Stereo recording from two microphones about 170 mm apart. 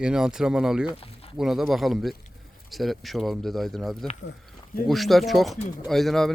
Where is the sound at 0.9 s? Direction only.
35° left (ahead or behind).